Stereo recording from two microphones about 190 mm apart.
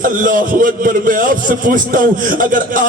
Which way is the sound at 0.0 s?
45° right (ahead or behind).